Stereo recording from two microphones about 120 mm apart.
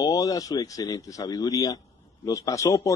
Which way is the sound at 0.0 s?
30° left (ahead or behind).